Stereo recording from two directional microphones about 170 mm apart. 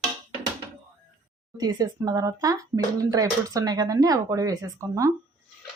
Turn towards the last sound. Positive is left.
turn(degrees=-20)  # may be behind; listen again after turning